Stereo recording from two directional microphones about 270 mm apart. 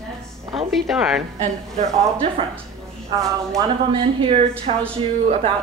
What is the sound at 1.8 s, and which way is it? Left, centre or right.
Speech, centre.